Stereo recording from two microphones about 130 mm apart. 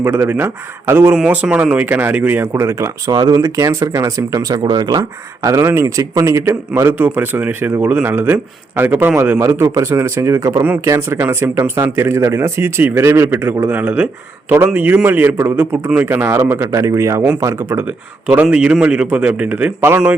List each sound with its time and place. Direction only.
0.0 s a man's voice: 20° right (ahead or behind)